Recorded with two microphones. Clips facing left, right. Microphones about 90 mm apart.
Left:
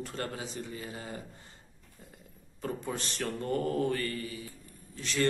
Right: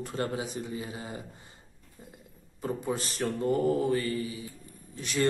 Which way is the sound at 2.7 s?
10° right (ahead or behind).